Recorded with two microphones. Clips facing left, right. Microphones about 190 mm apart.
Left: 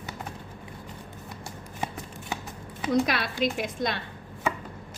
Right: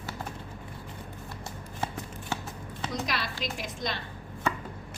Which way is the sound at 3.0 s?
60° left (ahead or behind).